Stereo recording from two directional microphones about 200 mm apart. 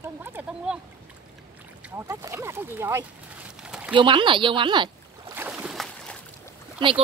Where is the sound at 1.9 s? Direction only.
15° right (ahead or behind).